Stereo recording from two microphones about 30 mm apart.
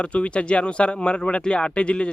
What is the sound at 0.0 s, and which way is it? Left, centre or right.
Speech, left.